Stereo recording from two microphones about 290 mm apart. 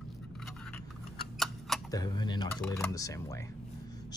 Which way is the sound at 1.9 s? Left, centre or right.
Centre.